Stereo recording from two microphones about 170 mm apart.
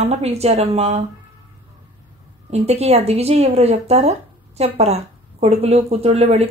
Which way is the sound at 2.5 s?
40° right (ahead or behind).